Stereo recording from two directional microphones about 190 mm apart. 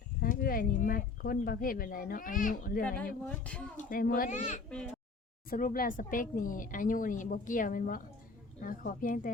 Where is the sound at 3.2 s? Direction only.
5° left (ahead or behind).